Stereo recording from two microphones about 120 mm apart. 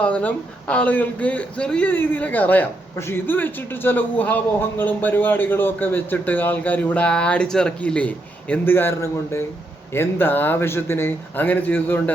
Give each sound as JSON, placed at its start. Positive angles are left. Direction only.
{"t": 0.0, "sound": "a man's voice", "side_deg": 10}